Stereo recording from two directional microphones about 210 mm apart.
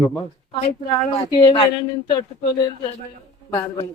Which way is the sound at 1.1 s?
20° left (ahead or behind).